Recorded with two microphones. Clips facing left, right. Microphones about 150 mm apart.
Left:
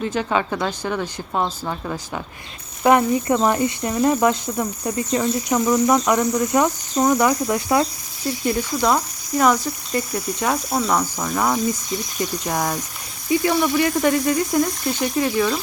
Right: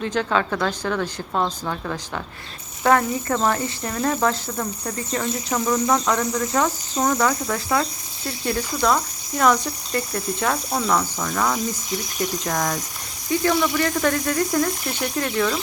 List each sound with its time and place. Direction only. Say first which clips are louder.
0.0 s speech: left 1 dB; 5° left (ahead or behind)
11.3 s speech: left 2 dB; 20° left (ahead or behind)
12.5 s speech: left 1 dB; 5° left (ahead or behind)